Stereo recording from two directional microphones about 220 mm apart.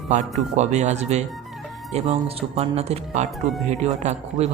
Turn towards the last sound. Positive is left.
turn(degrees=-30)  # may be behind; listen again after turning